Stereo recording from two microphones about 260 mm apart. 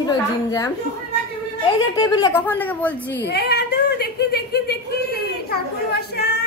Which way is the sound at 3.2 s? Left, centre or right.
Left.